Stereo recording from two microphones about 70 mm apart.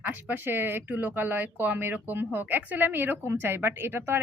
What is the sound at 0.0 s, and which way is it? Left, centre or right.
Speech, right.